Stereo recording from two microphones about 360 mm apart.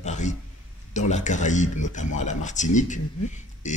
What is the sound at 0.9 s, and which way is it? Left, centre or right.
Speech, centre.